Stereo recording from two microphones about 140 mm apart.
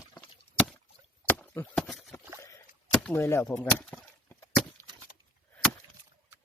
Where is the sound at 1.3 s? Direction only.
15° left (ahead or behind).